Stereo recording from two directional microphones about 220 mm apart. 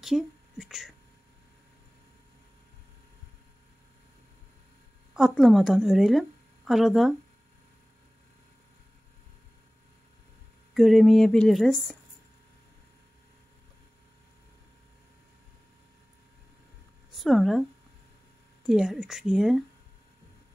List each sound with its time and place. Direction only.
0.0 s speech: centre (ahead or behind)
5.1 s a woman's voice: centre (ahead or behind)
10.7 s speech: centre (ahead or behind)
17.1 s speech: centre (ahead or behind)
18.7 s speech: centre (ahead or behind)